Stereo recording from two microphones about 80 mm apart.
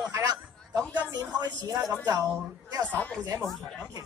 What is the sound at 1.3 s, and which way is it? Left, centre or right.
Speech, right.